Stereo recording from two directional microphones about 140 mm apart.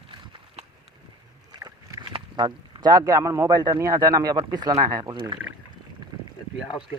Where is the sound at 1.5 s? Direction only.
30° right (ahead or behind).